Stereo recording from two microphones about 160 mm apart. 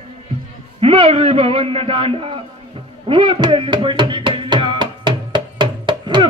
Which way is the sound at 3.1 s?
30° right (ahead or behind).